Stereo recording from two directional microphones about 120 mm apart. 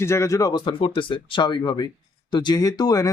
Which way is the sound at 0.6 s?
45° left (ahead or behind).